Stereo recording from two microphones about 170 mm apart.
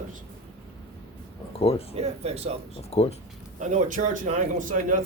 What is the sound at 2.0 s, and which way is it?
Speech, 40° right (ahead or behind).